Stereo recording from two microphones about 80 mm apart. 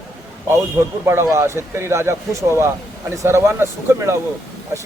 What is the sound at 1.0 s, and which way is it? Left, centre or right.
A man's voice, right.